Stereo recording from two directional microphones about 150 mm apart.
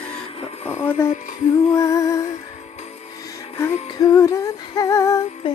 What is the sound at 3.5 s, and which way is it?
Female singing, 20° left (ahead or behind).